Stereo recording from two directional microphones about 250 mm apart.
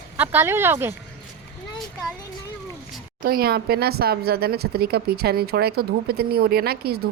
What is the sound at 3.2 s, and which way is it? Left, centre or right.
Speech, right.